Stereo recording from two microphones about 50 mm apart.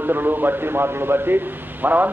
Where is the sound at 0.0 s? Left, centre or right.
Right.